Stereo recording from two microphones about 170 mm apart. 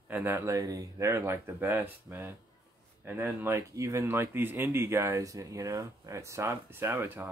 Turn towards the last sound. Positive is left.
turn(degrees=-15)  # may be behind; listen again after turning